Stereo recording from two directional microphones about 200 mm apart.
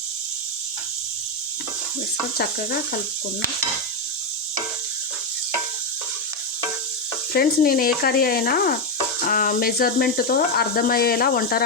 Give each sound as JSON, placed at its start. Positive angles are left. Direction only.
{"t": 7.3, "sound": "speech", "side_deg": 50}